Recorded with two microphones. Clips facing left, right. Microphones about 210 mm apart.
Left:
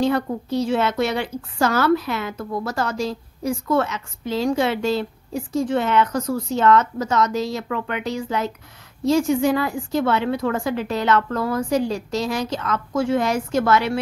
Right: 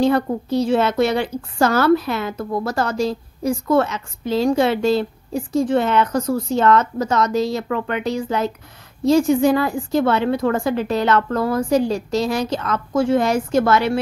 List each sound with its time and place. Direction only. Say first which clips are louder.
0.0 s a woman's voice: right 3 dB; 35° right (ahead or behind)